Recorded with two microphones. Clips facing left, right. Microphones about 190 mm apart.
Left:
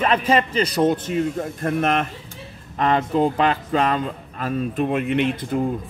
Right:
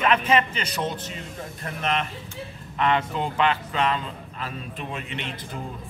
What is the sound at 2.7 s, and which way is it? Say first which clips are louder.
Speech: left 5 dB; 40° left (ahead or behind).